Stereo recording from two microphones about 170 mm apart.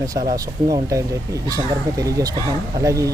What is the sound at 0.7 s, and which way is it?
Speech, 20° right (ahead or behind).